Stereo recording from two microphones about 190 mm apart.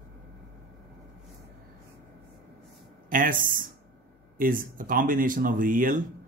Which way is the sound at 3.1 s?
45° right (ahead or behind).